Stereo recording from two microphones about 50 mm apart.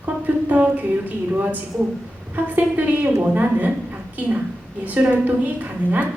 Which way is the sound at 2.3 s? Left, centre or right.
Right.